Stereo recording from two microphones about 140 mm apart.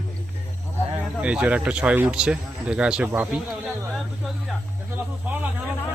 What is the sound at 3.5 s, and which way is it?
Speech, centre (ahead or behind).